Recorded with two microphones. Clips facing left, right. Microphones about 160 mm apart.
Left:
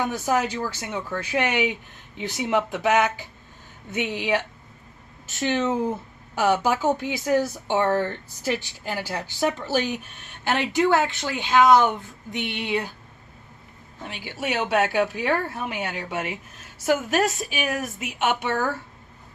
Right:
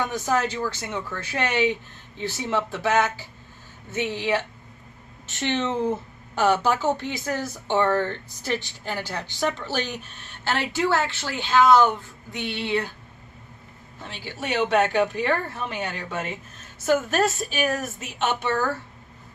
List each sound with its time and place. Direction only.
0.0 s speech: 10° left (ahead or behind)
14.0 s speech: 10° left (ahead or behind)